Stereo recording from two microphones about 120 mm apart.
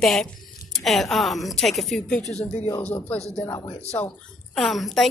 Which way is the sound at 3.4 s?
30° left (ahead or behind).